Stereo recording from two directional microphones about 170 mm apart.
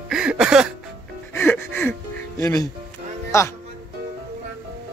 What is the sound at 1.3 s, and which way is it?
Speech, 10° left (ahead or behind).